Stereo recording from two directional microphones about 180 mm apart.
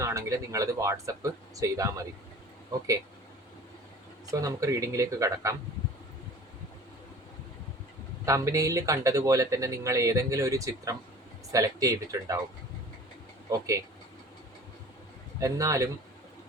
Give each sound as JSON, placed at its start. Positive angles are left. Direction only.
{"t": 0.0, "sound": "speech", "side_deg": -15}
{"t": 4.3, "sound": "speech", "side_deg": -20}
{"t": 8.2, "sound": "speech", "side_deg": -15}
{"t": 13.5, "sound": "speech", "side_deg": -15}
{"t": 15.4, "sound": "speech", "side_deg": -20}